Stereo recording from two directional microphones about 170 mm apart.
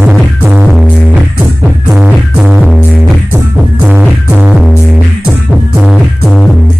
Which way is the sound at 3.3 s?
10° right (ahead or behind).